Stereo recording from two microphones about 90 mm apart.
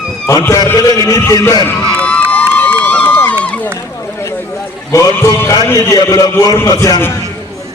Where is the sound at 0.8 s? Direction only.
40° left (ahead or behind).